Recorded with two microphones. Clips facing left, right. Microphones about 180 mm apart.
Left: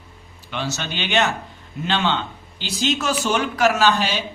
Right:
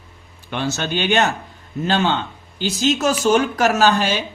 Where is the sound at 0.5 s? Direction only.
50° right (ahead or behind).